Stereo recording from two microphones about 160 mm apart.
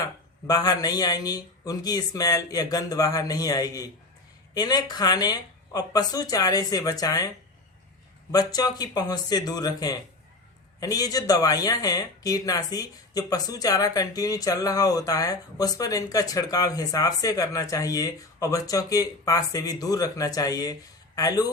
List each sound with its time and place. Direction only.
0.0 s speech: 25° left (ahead or behind)
8.3 s speech: 25° left (ahead or behind)